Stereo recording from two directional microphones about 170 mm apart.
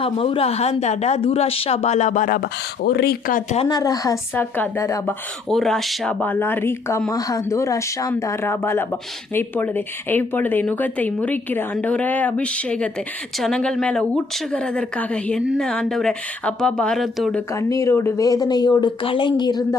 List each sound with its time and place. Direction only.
0.0 s speech: 35° left (ahead or behind); by 3.4 s 60° left (ahead or behind)
3.7 s speech: 20° left (ahead or behind)
5.5 s a woman's voice: centre (ahead or behind)
17.5 s speech: 20° left (ahead or behind)